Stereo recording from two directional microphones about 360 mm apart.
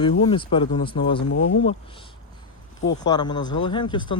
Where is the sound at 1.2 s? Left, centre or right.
Left.